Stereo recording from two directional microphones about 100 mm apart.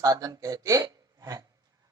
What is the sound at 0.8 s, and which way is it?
Hiccup, 40° right (ahead or behind).